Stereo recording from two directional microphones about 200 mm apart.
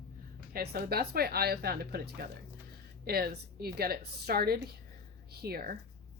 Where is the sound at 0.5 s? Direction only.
50° right (ahead or behind).